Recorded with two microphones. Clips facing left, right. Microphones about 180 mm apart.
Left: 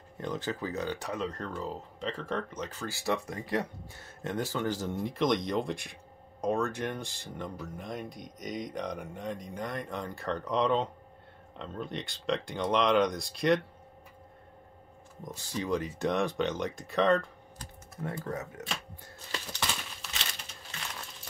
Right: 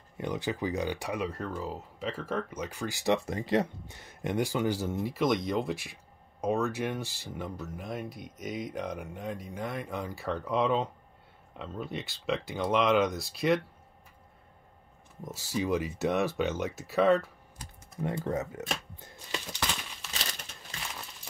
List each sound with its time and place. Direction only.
0.2 s speech: 10° right (ahead or behind)
15.2 s speech: 5° right (ahead or behind)
18.1 s speech: 25° right (ahead or behind)
18.9 s a sound: 20° right (ahead or behind)
20.0 s crumpling: centre (ahead or behind)